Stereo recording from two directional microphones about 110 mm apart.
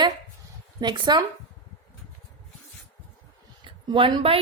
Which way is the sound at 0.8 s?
40° right (ahead or behind).